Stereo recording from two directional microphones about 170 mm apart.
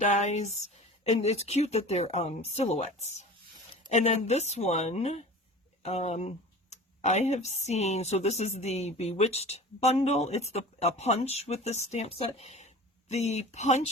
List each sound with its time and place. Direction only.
0.0 s speech: 45° left (ahead or behind)